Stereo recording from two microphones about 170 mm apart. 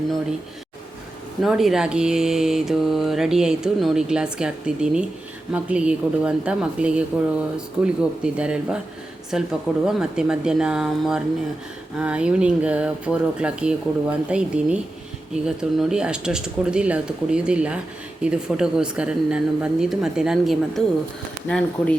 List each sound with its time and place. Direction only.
1.4 s speech: centre (ahead or behind)